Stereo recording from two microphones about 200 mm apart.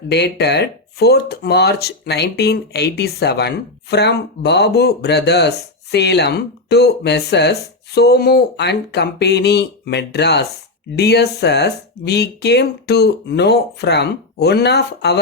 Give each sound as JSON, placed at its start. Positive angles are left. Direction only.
{"t": 0.1, "sound": "speech", "side_deg": 55}